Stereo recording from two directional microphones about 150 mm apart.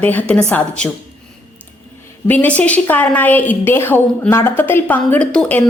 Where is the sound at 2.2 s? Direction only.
10° left (ahead or behind).